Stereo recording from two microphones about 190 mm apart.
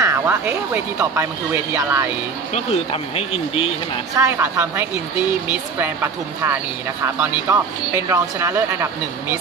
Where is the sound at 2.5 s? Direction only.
35° left (ahead or behind).